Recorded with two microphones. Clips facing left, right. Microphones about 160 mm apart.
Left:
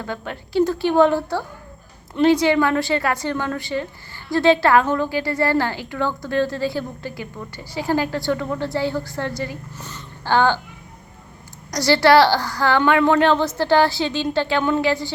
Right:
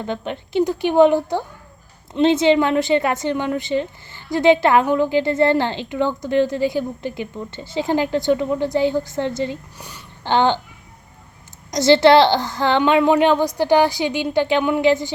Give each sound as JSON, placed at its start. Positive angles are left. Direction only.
{"t": 0.0, "sound": "a woman's voice", "side_deg": -20}
{"t": 11.7, "sound": "a woman's voice", "side_deg": -20}